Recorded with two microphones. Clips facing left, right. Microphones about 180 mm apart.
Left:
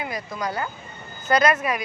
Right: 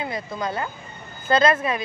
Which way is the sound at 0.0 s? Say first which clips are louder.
Right 1 dB; 25° right (ahead or behind).